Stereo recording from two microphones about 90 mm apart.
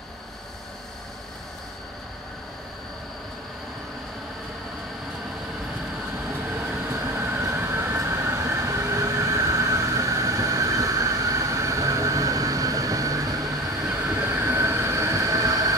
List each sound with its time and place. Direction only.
6.5 s train: 25° right (ahead or behind)
13.8 s train: 25° right (ahead or behind); by 15.7 s 40° right (ahead or behind)